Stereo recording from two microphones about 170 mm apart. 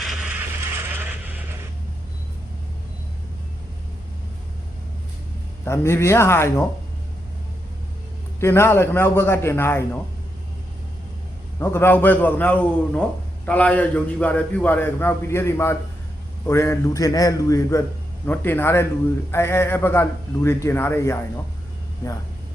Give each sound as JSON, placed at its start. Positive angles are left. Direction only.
{"t": 0.0, "sound": "a sound", "side_deg": -5}
{"t": 5.6, "sound": "a man's voice", "side_deg": 15}
{"t": 8.4, "sound": "a man's voice", "side_deg": 15}
{"t": 11.6, "sound": "a man's voice", "side_deg": 15}